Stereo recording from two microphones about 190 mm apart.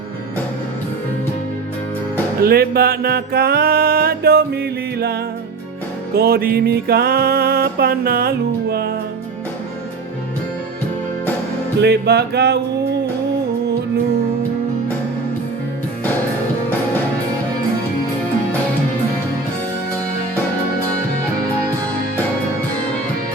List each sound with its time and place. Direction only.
2.4 s music: 55° right (ahead or behind)
6.1 s music: 55° right (ahead or behind)
11.8 s music: 60° right (ahead or behind)